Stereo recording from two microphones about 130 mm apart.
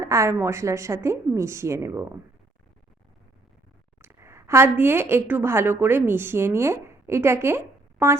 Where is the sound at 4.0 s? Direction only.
20° right (ahead or behind).